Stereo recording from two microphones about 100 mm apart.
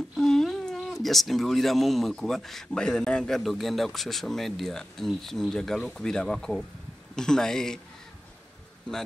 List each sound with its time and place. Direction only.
0.2 s speech: 5° left (ahead or behind)